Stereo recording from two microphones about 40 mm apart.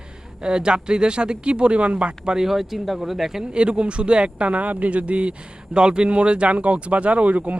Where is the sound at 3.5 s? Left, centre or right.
Right.